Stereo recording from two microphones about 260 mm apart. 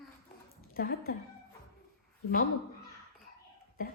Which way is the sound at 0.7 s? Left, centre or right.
Left.